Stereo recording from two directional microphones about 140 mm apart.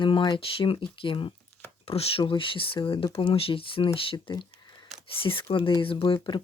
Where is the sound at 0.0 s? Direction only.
35° left (ahead or behind).